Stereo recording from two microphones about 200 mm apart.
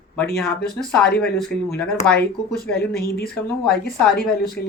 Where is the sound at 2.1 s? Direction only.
50° left (ahead or behind).